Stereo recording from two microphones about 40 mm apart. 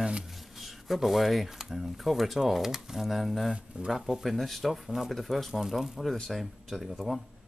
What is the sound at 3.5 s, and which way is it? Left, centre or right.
Speech, right.